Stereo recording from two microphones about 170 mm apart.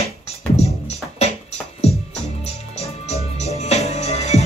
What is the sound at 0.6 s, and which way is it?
Music, 40° left (ahead or behind).